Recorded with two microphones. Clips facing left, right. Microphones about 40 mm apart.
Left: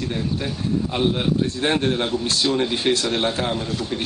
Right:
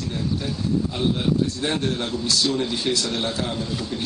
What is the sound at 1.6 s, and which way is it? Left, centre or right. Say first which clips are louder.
A man's voice: left 4 dB; left.